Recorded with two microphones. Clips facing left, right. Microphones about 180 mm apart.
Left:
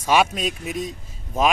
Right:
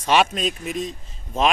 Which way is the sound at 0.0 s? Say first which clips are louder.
Even; 10° left (ahead or behind).